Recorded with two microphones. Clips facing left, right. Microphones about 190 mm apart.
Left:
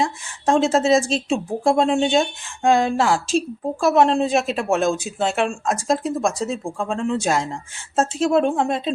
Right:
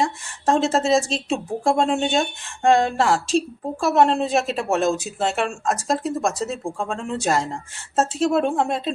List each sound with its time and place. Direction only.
0.0 s a woman's voice: centre (ahead or behind)